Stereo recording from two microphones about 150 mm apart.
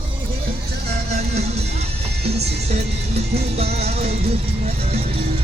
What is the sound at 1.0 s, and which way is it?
Music, 45° right (ahead or behind).